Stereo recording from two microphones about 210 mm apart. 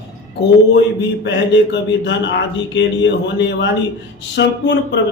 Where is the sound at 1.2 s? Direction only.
60° left (ahead or behind).